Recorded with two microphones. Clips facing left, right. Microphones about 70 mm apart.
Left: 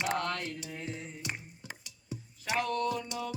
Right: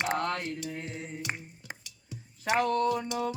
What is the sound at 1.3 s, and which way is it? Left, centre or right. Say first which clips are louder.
Music: right 4 dB; right.